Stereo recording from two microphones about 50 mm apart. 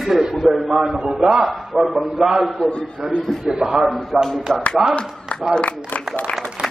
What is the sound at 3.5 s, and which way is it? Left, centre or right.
Speech, centre.